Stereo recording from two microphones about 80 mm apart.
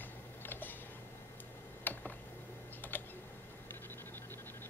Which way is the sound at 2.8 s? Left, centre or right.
Left.